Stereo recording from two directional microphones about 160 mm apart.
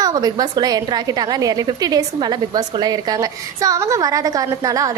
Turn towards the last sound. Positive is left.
turn(degrees=-20)  # may be behind; listen again after turning